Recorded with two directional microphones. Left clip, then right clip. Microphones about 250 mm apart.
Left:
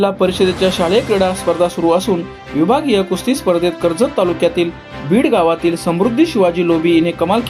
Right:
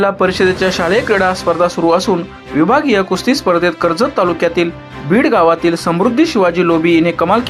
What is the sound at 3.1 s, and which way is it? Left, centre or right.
Speech, centre.